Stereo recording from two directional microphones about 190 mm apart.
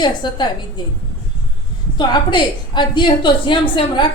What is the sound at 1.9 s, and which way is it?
A woman's voice, 25° left (ahead or behind).